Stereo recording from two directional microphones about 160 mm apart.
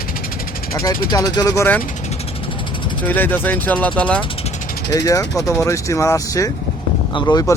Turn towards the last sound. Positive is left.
turn(degrees=25)  # may be behind; listen again after turning